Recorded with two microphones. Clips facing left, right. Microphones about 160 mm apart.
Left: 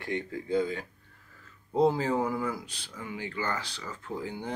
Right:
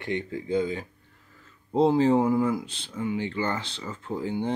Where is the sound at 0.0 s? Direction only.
20° right (ahead or behind).